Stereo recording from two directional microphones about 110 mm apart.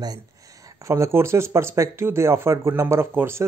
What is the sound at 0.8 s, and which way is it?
Speech, 25° right (ahead or behind).